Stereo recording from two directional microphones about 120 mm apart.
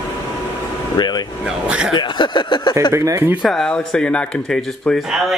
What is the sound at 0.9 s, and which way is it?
Speech, 35° left (ahead or behind).